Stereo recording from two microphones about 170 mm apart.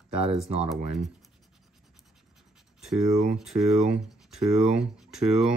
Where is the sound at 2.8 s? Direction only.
Centre (ahead or behind).